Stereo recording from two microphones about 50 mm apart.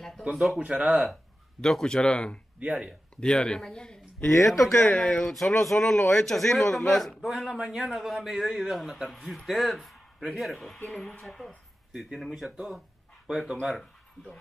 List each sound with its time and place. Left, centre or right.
0.3 s a man's voice: centre
0.6 s speech: right
1.6 s a man's voice: centre
2.6 s speech: centre
3.2 s a man's voice: centre
4.5 s a man's voice: centre
4.8 s speech: left
5.2 s a man's voice: centre
7.2 s a man's voice: centre